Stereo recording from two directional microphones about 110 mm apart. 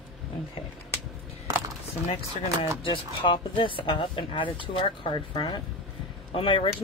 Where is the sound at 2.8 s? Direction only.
50° left (ahead or behind).